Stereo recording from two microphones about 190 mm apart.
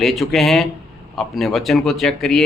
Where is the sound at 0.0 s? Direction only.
Centre (ahead or behind).